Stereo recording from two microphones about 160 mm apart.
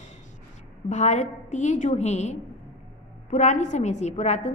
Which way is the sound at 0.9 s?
45° left (ahead or behind).